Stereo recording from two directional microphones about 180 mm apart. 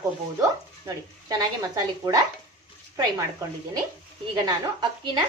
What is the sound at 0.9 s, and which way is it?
Speech, 20° right (ahead or behind).